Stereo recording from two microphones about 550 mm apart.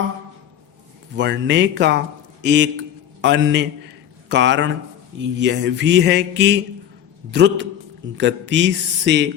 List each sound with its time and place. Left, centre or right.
1.1 s a man's voice: centre